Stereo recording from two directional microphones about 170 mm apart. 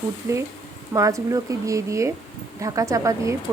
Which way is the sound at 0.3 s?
15° right (ahead or behind).